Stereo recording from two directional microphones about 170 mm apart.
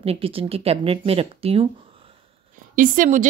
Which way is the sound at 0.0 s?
35° right (ahead or behind).